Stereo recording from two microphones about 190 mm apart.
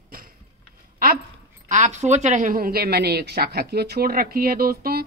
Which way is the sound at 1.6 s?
40° right (ahead or behind).